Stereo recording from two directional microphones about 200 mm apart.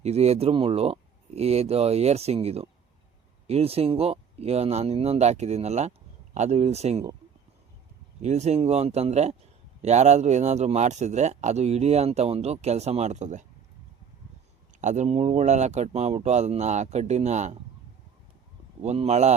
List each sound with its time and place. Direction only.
0.0 s speech: 30° right (ahead or behind)
8.2 s speech: 35° right (ahead or behind)
14.8 s speech: 35° right (ahead or behind)
18.8 s speech: 35° right (ahead or behind)